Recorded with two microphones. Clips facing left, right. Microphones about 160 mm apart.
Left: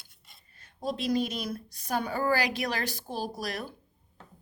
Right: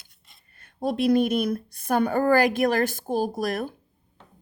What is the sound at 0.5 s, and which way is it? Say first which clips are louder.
Speech: right 7 dB; 55° right (ahead or behind).